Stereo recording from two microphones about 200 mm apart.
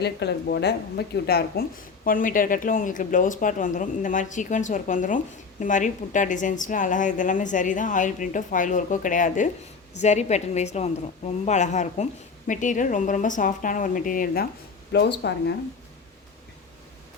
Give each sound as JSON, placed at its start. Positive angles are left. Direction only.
{"t": 0.0, "sound": "speech", "side_deg": 55}
{"t": 14.9, "sound": "speech", "side_deg": 55}